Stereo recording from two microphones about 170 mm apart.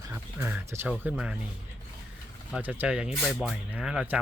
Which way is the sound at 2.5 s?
10° right (ahead or behind).